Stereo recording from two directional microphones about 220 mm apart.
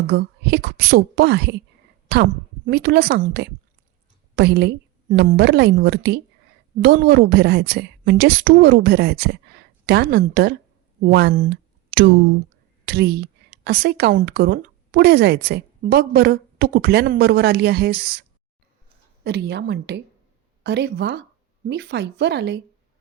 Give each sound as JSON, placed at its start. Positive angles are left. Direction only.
{"t": 0.1, "sound": "a woman's voice", "side_deg": -50}